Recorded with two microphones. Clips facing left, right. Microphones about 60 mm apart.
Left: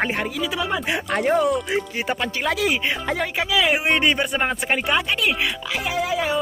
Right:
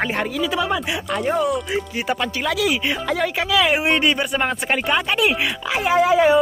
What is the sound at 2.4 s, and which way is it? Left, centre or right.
Speech, left.